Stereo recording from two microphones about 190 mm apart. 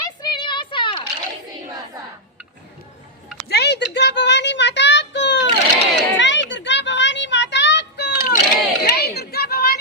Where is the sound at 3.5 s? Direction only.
60° left (ahead or behind).